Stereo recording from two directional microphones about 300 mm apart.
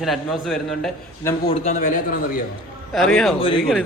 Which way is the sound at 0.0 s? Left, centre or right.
Centre.